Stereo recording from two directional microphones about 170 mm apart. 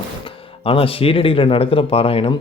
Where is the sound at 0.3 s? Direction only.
35° left (ahead or behind).